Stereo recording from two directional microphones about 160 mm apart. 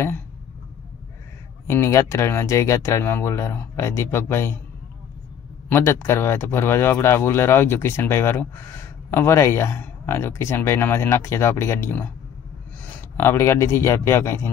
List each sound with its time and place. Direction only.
1.7 s speech: 15° left (ahead or behind)
5.7 s a man's voice: 15° left (ahead or behind)